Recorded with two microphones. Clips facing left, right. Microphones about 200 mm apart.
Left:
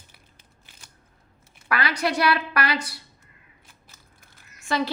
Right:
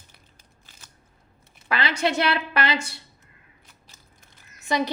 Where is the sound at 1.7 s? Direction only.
25° right (ahead or behind).